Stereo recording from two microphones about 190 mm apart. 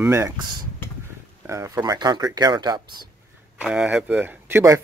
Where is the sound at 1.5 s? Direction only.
15° right (ahead or behind).